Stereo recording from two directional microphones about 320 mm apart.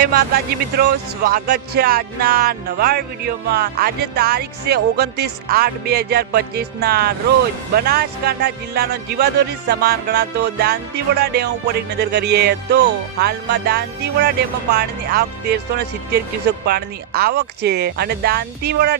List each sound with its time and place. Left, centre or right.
0.0 s speech: right
16.6 s speech: right